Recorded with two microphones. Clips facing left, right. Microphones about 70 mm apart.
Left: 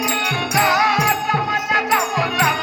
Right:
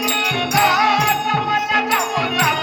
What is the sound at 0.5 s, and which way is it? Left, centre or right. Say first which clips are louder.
Music: right 1 dB; left.